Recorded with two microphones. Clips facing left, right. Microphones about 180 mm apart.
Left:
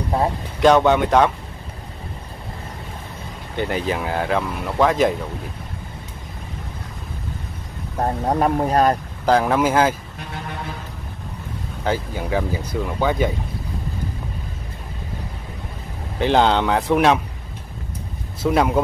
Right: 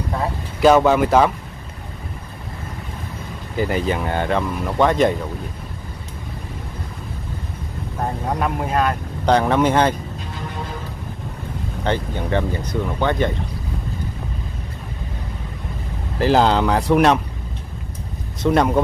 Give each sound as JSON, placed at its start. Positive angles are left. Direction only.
{"t": 0.6, "sound": "speech", "side_deg": -5}
{"t": 3.5, "sound": "speech", "side_deg": 0}
{"t": 8.0, "sound": "speech", "side_deg": 35}
{"t": 9.2, "sound": "speech", "side_deg": 5}
{"t": 11.8, "sound": "speech", "side_deg": 5}
{"t": 16.2, "sound": "speech", "side_deg": 0}
{"t": 18.4, "sound": "speech", "side_deg": 5}